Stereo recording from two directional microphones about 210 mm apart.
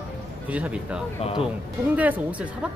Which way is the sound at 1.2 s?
25° left (ahead or behind).